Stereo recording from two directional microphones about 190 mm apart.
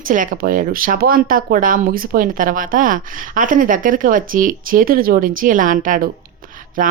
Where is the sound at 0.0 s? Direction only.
45° right (ahead or behind).